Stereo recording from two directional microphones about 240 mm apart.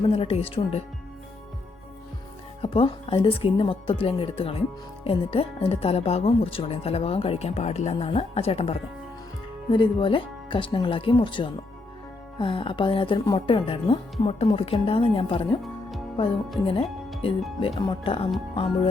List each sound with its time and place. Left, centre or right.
0.1 s speech: left
2.6 s speech: left
16.6 s speech: left